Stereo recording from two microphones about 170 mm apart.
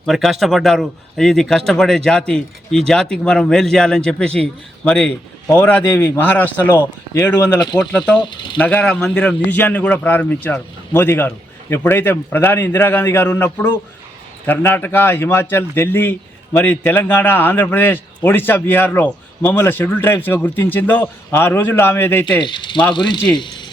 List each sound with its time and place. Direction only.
0.0 s a man's voice: centre (ahead or behind); by 7.8 s 20° left (ahead or behind)
7.8 s a man's voice: 5° left (ahead or behind)
22.4 s speech: 25° left (ahead or behind)